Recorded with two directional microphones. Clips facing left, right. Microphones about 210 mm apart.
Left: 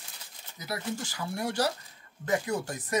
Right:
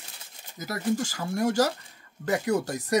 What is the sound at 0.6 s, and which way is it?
Speech, 45° right (ahead or behind).